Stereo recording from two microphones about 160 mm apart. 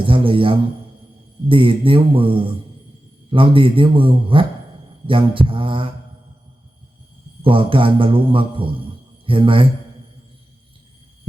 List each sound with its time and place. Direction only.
0.0 s mantra: 35° right (ahead or behind)
7.4 s mantra: 35° right (ahead or behind)